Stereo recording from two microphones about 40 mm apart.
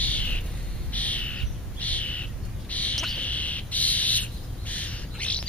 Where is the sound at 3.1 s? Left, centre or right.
Left.